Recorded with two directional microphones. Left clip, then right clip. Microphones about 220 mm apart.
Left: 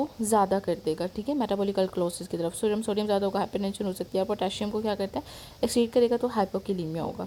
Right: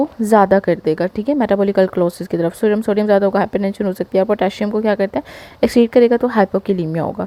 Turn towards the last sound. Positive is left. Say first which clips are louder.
# right 12 dB
turn(degrees=-30)  # may be behind; listen again after turning